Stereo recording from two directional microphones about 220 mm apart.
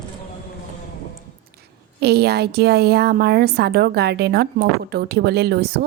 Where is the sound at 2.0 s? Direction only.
45° right (ahead or behind).